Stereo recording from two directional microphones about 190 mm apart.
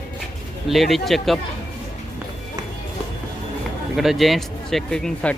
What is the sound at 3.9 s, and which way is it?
Speech, centre (ahead or behind).